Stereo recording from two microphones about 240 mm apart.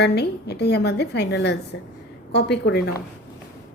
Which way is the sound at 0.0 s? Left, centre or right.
Left.